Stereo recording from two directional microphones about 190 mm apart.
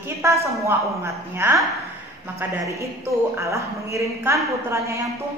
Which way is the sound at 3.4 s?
15° right (ahead or behind).